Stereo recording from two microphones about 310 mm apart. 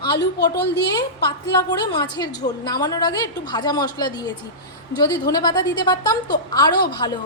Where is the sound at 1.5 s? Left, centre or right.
Centre.